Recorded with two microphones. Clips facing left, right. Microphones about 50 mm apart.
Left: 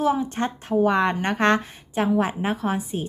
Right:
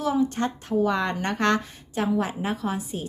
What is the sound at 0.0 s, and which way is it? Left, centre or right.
A woman's voice, left.